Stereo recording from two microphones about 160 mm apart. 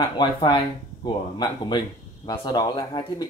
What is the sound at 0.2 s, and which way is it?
Speech, 30° left (ahead or behind).